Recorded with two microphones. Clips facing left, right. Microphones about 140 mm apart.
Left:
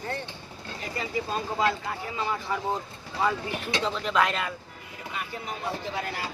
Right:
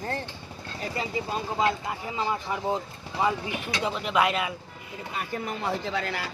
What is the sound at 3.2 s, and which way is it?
Speech, 15° right (ahead or behind).